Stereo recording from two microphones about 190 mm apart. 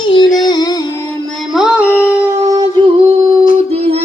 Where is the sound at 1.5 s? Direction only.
5° right (ahead or behind).